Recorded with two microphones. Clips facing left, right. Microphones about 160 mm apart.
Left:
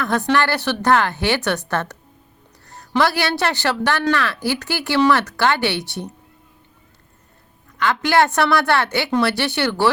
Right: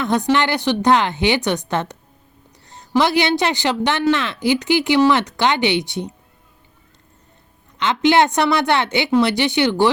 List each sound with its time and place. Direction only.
0.0 s a woman's voice: 15° right (ahead or behind)
7.8 s speech: 20° right (ahead or behind)